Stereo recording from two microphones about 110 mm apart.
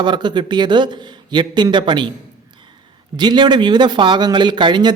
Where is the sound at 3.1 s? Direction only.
45° right (ahead or behind).